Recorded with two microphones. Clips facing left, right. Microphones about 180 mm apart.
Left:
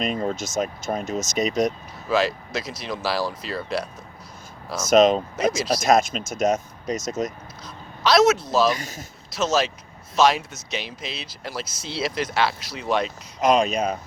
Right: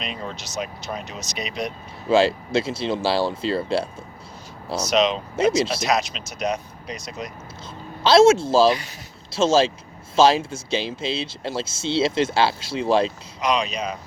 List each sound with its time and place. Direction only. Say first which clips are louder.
0.0 s speech: left 7 dB; 45° left (ahead or behind)
2.0 s speech: right 4 dB; 30° right (ahead or behind)
4.9 s speech: left 5 dB; 50° left (ahead or behind)
5.4 s speech: right 4 dB; 25° right (ahead or behind)
5.8 s speech: left 4 dB; 50° left (ahead or behind)
8.0 s speech: right 4 dB; 30° right (ahead or behind)
8.7 s speech: right 3 dB; 45° left (ahead or behind)
9.3 s speech: right 5 dB; 30° right (ahead or behind)
13.4 s speech: left 4 dB; 50° left (ahead or behind)